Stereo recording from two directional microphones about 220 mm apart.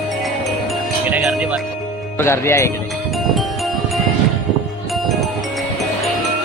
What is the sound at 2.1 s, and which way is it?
Speech, 10° left (ahead or behind).